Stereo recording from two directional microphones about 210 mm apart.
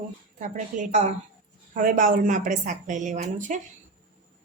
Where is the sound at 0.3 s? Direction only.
35° right (ahead or behind).